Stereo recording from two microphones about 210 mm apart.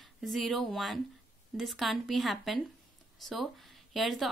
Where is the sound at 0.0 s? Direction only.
Centre (ahead or behind).